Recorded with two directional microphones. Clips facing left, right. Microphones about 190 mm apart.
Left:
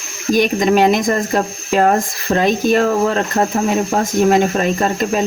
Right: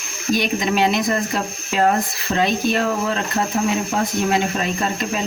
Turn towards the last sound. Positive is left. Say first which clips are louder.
# left 6 dB
turn(degrees=45)  # may be behind; listen again after turning